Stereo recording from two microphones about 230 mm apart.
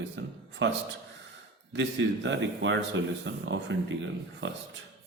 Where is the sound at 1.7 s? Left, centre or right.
Right.